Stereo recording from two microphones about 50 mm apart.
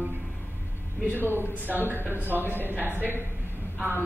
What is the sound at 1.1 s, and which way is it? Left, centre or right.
Speech, right.